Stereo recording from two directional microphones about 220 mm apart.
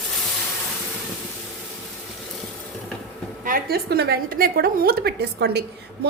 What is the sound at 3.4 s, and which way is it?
A woman's voice, 40° right (ahead or behind).